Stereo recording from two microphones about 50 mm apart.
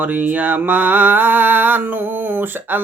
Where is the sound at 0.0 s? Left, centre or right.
Right.